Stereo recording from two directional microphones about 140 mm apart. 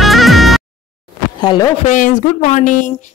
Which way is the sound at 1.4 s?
30° left (ahead or behind).